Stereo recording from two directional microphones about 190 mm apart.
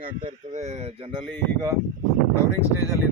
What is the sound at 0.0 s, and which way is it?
Speech, 35° right (ahead or behind).